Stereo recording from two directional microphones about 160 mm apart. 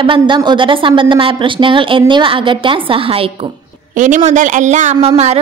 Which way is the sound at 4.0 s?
45° right (ahead or behind).